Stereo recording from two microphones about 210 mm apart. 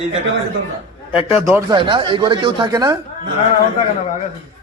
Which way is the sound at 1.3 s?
10° right (ahead or behind).